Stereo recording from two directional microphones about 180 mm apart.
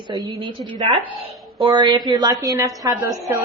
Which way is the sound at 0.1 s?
20° right (ahead or behind).